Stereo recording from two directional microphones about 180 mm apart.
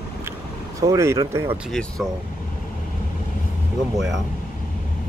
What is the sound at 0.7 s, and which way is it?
Speech, 15° right (ahead or behind).